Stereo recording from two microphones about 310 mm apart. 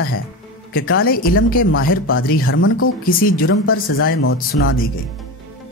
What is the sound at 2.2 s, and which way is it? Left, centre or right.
Speech, left.